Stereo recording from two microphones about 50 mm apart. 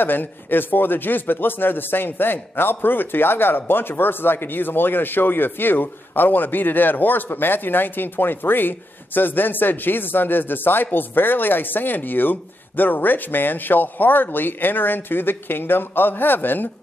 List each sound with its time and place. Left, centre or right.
0.0 s speech: left